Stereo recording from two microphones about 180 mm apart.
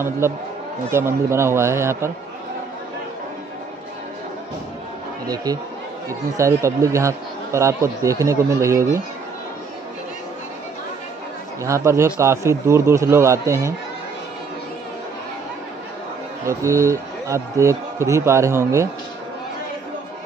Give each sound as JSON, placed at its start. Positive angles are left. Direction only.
{"t": 0.8, "sound": "speech", "side_deg": -15}
{"t": 5.2, "sound": "speech", "side_deg": -20}
{"t": 11.6, "sound": "speech", "side_deg": -15}
{"t": 16.4, "sound": "speech", "side_deg": -15}